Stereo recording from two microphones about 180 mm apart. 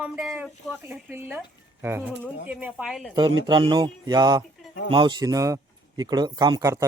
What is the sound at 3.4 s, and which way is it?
Speech, 25° right (ahead or behind).